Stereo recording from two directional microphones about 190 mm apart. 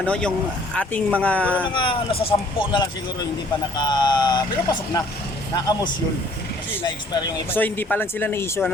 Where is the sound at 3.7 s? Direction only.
20° left (ahead or behind).